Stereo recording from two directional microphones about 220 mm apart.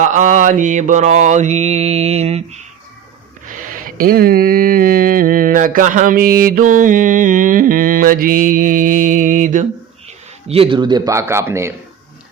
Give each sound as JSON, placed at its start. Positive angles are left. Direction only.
{"t": 0.0, "sound": "mantra", "side_deg": -35}
{"t": 3.5, "sound": "a sound", "side_deg": -40}
{"t": 6.7, "sound": "mantra", "side_deg": -35}
{"t": 10.5, "sound": "a man's voice", "side_deg": -25}